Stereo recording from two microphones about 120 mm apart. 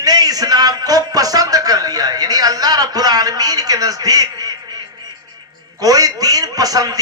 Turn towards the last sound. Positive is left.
turn(degrees=-30)  # may be behind; listen again after turning